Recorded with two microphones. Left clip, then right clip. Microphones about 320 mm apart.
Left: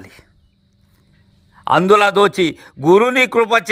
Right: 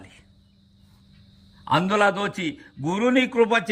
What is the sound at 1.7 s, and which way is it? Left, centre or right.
A man's voice, centre.